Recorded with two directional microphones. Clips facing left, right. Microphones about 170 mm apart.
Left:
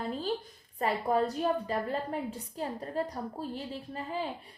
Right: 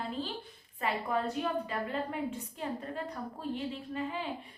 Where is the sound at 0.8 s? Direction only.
35° left (ahead or behind).